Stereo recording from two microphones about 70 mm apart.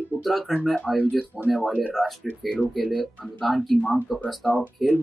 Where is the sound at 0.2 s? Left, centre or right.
Centre.